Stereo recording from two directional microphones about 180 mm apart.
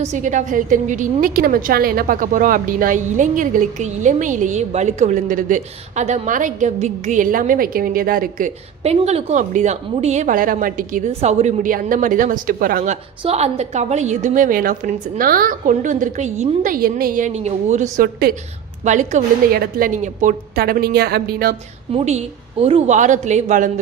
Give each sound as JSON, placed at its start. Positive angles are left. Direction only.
{"t": 0.0, "sound": "a woman's voice", "side_deg": -40}
{"t": 18.9, "sound": "a woman's voice", "side_deg": -45}
{"t": 21.9, "sound": "a woman's voice", "side_deg": -35}